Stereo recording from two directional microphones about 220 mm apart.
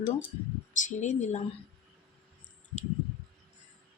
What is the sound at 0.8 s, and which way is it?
Speech, 35° left (ahead or behind).